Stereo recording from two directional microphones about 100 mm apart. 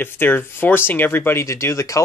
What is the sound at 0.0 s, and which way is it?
Speech, 20° left (ahead or behind).